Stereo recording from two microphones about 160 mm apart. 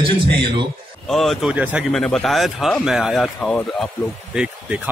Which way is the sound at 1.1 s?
Centre (ahead or behind).